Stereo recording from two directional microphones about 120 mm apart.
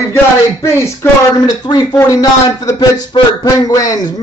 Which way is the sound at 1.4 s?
35° left (ahead or behind).